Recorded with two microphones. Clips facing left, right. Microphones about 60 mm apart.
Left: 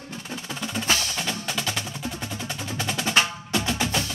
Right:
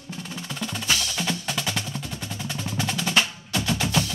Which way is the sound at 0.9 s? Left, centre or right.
Left.